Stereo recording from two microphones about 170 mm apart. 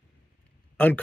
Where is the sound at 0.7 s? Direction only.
10° left (ahead or behind).